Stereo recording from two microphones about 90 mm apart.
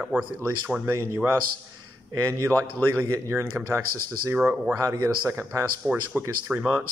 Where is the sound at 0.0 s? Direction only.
15° right (ahead or behind).